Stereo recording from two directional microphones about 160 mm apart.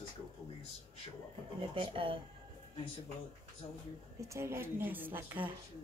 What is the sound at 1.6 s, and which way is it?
Speech, 35° right (ahead or behind).